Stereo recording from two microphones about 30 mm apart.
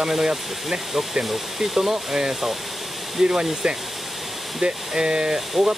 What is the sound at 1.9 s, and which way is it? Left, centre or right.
Speech, centre.